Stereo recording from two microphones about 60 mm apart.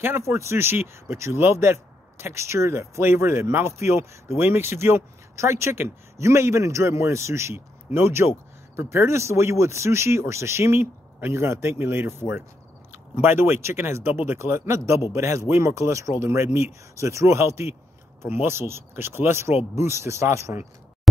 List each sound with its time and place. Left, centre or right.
0.3 s speech: right
4.4 s speech: right